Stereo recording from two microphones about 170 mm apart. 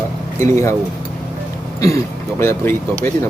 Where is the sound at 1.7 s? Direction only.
20° left (ahead or behind).